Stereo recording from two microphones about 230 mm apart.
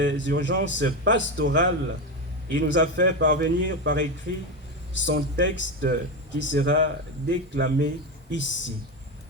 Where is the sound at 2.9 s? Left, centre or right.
Right.